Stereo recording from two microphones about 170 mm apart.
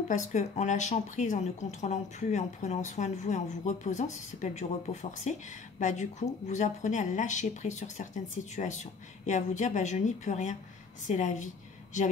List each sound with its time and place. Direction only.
0.1 s speech: 45° left (ahead or behind)
4.9 s speech: 20° left (ahead or behind)
5.8 s speech: 45° left (ahead or behind)
9.2 s a woman's voice: 45° left (ahead or behind)